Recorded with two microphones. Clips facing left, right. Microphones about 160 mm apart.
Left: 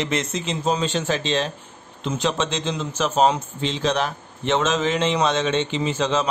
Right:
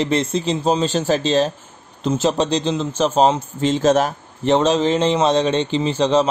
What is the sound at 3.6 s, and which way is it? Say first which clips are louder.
A man's voice: right 7 dB; 45° right (ahead or behind).